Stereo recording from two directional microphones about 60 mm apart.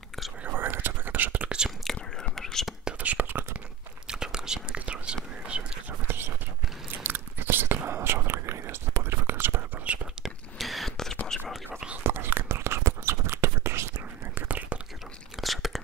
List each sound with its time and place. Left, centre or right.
0.6 s whispering: right
2.0 s whispering: centre
2.8 s whispering: right
4.1 s whispering: centre
5.9 s whispering: right
10.2 s a sound: centre
11.2 s whispering: centre
12.0 s whispering: right
14.3 s whispering: right
15.4 s tearing: centre